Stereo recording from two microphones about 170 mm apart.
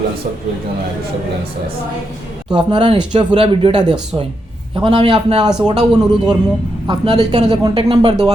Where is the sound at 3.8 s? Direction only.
25° right (ahead or behind).